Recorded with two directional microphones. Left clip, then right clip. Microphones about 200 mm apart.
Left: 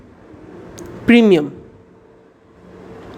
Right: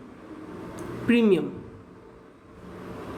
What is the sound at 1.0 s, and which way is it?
Speech, 45° left (ahead or behind).